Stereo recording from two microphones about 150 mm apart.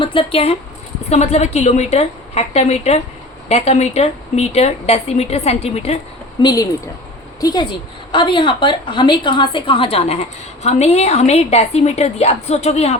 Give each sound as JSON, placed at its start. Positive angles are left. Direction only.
{"t": 0.0, "sound": "a woman's voice", "side_deg": 35}
{"t": 6.4, "sound": "a woman's voice", "side_deg": 25}